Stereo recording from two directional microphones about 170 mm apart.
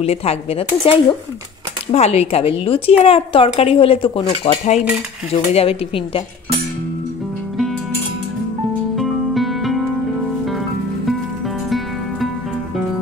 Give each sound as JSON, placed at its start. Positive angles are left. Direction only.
{"t": 0.0, "sound": "speech", "side_deg": 35}
{"t": 8.9, "sound": "music", "side_deg": 0}
{"t": 11.1, "sound": "music", "side_deg": 0}